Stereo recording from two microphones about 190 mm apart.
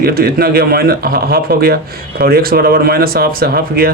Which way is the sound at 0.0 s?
55° right (ahead or behind).